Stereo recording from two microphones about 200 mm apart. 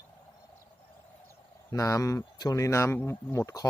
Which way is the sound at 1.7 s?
15° left (ahead or behind).